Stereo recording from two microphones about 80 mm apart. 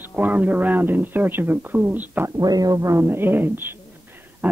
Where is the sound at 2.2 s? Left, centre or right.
Right.